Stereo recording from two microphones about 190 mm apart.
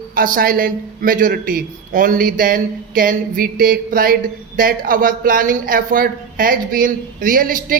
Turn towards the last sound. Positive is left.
turn(degrees=-45)  # may be behind; listen again after turning